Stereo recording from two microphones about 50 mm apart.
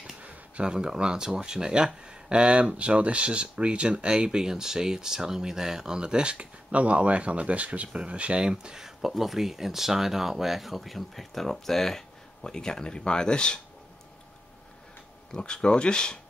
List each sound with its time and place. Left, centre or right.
0.2 s a sound: right
0.7 s speech: centre
15.3 s speech: centre